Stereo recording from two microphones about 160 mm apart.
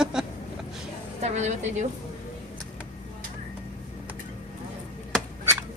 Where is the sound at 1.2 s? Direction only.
45° right (ahead or behind).